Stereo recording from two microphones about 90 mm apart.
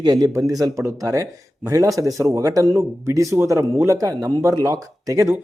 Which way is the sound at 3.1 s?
30° right (ahead or behind).